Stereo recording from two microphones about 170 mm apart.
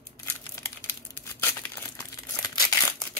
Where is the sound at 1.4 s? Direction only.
15° left (ahead or behind).